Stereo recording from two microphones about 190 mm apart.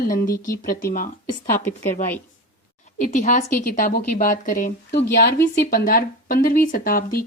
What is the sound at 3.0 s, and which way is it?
A woman's voice, 45° left (ahead or behind).